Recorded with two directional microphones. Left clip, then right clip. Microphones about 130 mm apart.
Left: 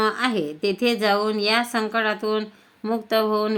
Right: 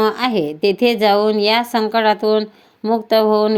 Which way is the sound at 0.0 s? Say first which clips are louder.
Right 5 dB; 40° right (ahead or behind).